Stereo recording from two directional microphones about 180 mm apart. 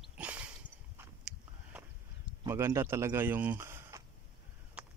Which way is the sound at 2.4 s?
15° right (ahead or behind).